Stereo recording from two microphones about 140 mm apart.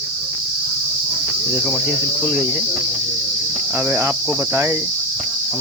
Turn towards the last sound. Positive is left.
turn(degrees=-15)  # may be behind; listen again after turning